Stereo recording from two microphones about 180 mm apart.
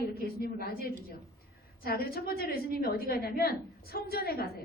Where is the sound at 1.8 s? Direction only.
55° left (ahead or behind).